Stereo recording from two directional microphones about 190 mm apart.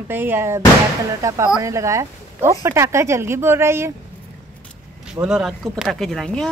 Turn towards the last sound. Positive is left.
turn(degrees=0)  # may be behind; listen again after turning